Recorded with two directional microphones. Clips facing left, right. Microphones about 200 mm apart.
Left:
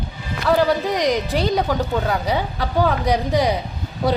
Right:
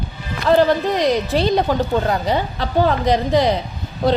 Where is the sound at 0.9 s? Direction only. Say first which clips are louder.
Right 2 dB; 15° left (ahead or behind).